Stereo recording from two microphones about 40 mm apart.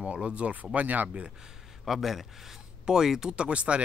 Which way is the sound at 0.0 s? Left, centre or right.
Right.